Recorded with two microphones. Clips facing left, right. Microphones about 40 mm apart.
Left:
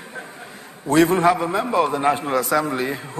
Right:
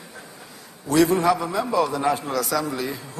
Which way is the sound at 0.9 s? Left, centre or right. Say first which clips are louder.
Left 2 dB; left.